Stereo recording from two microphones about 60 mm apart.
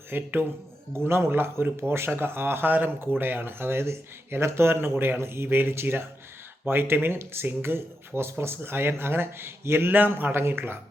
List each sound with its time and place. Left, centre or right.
0.1 s speech: right